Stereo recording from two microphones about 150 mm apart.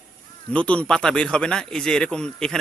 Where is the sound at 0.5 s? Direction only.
10° left (ahead or behind).